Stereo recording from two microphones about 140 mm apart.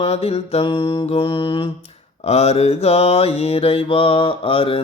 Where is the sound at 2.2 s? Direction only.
50° left (ahead or behind).